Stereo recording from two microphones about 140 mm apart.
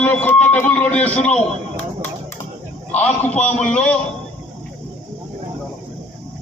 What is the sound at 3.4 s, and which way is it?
Speech, 5° left (ahead or behind).